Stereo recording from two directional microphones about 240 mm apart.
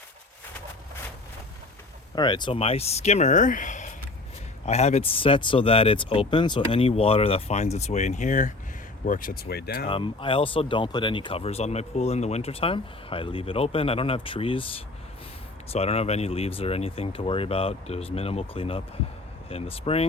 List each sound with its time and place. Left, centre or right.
2.1 s speech: centre; by 9.8 s left
9.9 s speech: left
15.7 s speech: left